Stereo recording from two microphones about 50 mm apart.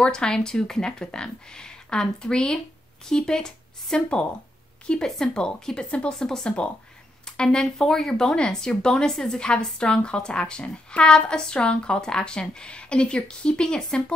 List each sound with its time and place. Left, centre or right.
0.0 s speech: centre